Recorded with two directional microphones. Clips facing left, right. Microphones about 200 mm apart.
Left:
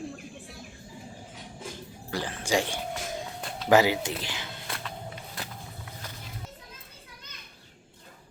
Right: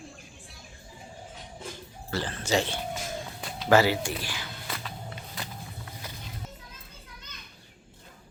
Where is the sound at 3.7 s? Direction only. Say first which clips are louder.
Even; 15° left (ahead or behind).